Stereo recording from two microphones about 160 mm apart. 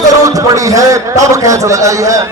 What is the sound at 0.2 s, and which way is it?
A man's voice, 20° right (ahead or behind).